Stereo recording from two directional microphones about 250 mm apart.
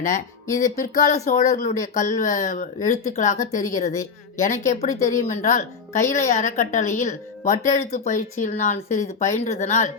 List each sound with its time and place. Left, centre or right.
0.6 s a woman's voice: left